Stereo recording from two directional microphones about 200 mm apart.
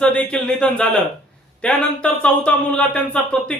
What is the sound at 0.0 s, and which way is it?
Speech, 5° left (ahead or behind).